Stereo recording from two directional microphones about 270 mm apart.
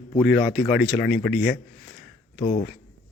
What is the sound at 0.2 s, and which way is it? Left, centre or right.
Speech, centre.